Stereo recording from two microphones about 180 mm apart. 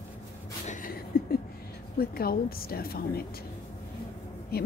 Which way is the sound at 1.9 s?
55° left (ahead or behind).